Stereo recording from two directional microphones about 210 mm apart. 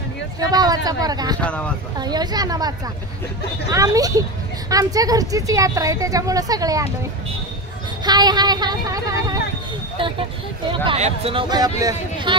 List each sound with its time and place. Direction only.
0.4 s speech: 20° right (ahead or behind)
1.4 s speech: 5° left (ahead or behind)
2.0 s speech: 20° right (ahead or behind)
3.7 s a woman's voice: 15° right (ahead or behind)
8.0 s speech: 20° right (ahead or behind)
10.7 s speech: 30° right (ahead or behind)